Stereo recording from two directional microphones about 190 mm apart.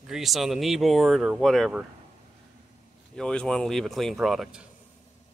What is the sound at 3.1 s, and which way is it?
Speech, 5° left (ahead or behind).